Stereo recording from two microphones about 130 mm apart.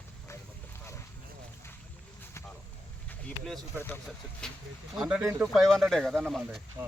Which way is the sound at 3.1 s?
5° left (ahead or behind).